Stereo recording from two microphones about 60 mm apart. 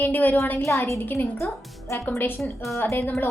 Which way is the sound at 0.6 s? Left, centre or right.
Left.